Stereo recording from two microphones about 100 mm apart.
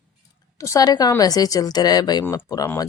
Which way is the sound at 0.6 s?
35° left (ahead or behind).